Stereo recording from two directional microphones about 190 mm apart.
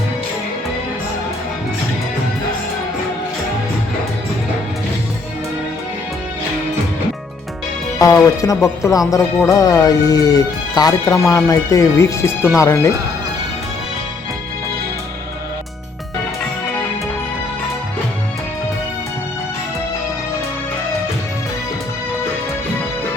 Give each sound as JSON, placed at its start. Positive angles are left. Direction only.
{"t": 7.9, "sound": "speech", "side_deg": 20}